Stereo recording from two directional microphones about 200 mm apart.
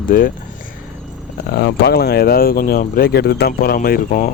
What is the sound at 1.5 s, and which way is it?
Speech, 55° left (ahead or behind).